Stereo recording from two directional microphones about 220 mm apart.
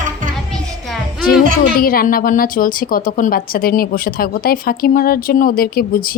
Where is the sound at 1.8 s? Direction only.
40° left (ahead or behind).